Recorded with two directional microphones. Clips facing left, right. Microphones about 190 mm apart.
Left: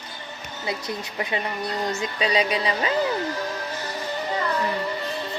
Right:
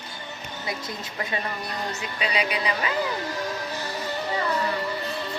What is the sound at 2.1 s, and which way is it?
Speech, 35° left (ahead or behind).